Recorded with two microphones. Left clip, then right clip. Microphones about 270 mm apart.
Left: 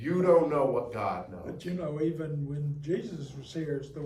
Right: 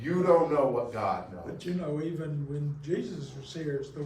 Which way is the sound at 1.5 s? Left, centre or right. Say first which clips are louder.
Right 1 dB; left.